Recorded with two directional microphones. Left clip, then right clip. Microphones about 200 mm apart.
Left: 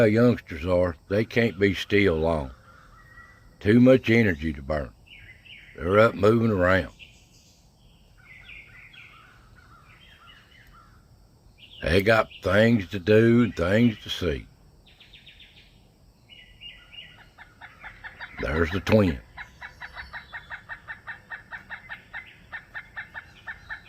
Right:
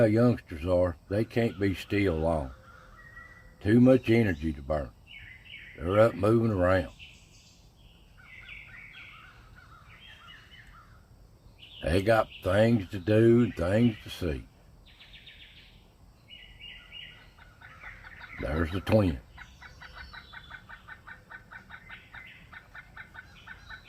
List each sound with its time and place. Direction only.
0.0 s speech: 30° left (ahead or behind)
3.6 s speech: 35° left (ahead or behind)
11.8 s speech: 30° left (ahead or behind)
18.2 s fowl: 40° left (ahead or behind)